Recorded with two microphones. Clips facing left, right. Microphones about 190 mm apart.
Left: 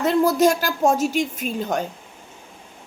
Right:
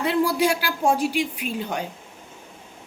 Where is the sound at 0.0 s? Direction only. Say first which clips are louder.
Left 4 dB; 45° left (ahead or behind).